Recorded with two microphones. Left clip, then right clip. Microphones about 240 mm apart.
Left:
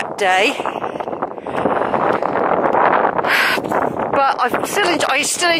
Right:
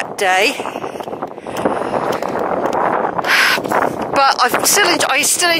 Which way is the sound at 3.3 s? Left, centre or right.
Centre.